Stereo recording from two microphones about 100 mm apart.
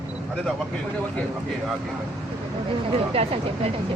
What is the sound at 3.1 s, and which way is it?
Speech, 90° right.